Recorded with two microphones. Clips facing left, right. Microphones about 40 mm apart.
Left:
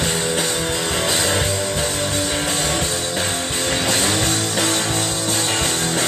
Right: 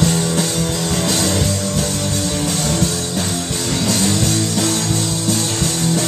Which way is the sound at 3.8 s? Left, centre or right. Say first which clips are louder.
Right 3 dB; left.